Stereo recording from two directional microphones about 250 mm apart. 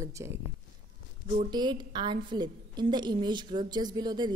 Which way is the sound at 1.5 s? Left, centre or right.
Centre.